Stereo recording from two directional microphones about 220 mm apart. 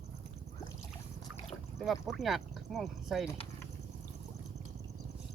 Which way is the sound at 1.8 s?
Centre (ahead or behind).